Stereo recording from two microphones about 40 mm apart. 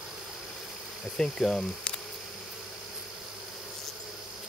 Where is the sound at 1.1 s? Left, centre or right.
Centre.